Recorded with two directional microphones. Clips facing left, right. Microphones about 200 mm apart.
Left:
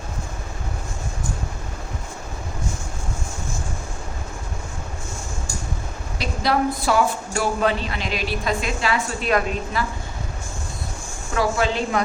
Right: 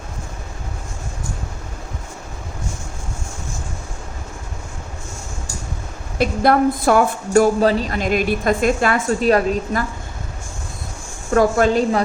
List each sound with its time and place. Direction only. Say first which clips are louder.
6.1 s a woman's voice: right 6 dB; 55° right (ahead or behind)
9.3 s a woman's voice: right 1 dB; 40° right (ahead or behind)
11.3 s a woman's voice: right 7 dB; 50° right (ahead or behind)